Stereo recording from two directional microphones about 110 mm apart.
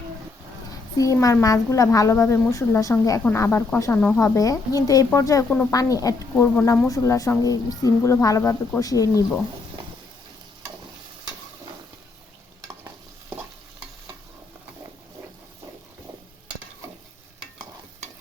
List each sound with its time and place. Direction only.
0.9 s a woman's voice: 30° left (ahead or behind)
6.3 s a woman's voice: 20° left (ahead or behind)